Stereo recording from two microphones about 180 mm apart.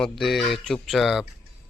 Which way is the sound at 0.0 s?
Centre (ahead or behind).